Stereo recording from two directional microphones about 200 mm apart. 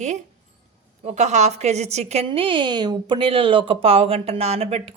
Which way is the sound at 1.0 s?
35° right (ahead or behind).